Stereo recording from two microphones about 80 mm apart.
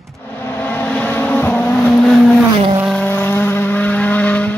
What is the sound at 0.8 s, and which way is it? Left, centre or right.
Vehicle, left.